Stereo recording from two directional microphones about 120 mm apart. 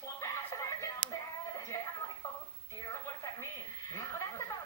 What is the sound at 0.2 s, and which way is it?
Music, 25° left (ahead or behind).